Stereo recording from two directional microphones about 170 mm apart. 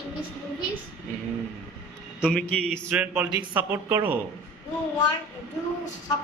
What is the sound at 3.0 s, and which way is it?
A man's voice, 10° right (ahead or behind).